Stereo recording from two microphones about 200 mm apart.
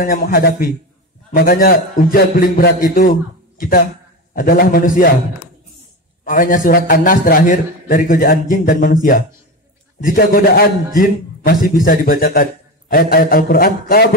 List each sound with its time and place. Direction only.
0.0 s a man's voice: 45° left (ahead or behind)
6.2 s a man's voice: 40° left (ahead or behind)